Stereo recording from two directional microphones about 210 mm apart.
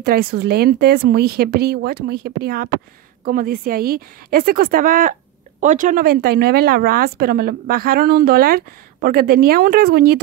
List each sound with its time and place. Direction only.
0.0 s a woman's voice: 45° right (ahead or behind)